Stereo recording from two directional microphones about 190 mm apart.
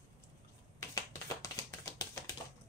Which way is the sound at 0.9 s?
15° left (ahead or behind).